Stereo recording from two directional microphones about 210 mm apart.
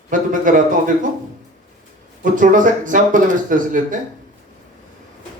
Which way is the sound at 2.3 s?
40° right (ahead or behind).